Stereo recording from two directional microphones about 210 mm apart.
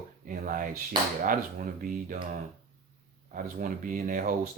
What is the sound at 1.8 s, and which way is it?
Speech, 40° right (ahead or behind).